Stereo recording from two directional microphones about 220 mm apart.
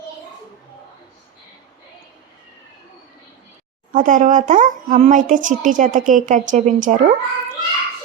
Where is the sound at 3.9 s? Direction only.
35° right (ahead or behind).